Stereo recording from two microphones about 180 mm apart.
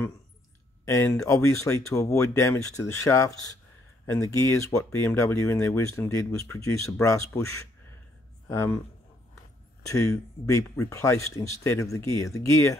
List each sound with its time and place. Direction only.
0.8 s speech: 15° left (ahead or behind)
9.8 s speech: 15° left (ahead or behind)